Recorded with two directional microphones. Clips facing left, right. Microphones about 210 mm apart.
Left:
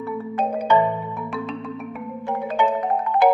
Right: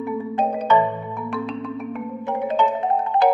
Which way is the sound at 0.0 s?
15° right (ahead or behind).